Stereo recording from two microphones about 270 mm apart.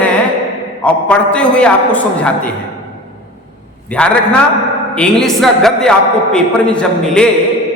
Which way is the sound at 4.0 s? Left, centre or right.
Centre.